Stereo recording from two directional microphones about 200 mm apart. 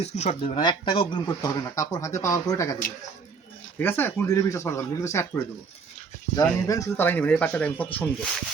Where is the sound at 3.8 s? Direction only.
10° left (ahead or behind).